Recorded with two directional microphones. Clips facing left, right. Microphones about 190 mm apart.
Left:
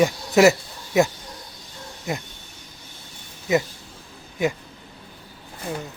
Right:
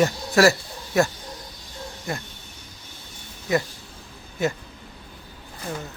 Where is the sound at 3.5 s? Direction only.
20° left (ahead or behind).